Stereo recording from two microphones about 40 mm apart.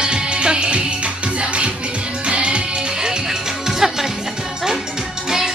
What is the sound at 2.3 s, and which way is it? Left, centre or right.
Music, right.